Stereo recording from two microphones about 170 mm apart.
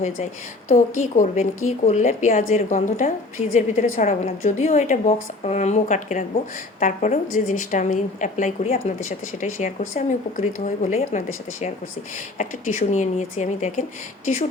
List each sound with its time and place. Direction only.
0.7 s a woman's voice: 45° left (ahead or behind)
12.4 s a woman's voice: 45° left (ahead or behind)